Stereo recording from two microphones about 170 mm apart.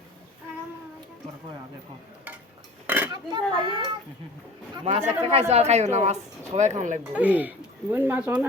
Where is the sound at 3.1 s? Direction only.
25° right (ahead or behind).